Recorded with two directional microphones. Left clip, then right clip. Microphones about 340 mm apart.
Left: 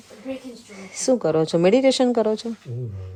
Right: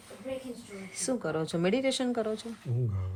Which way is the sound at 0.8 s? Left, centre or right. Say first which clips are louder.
Left 13 dB; left.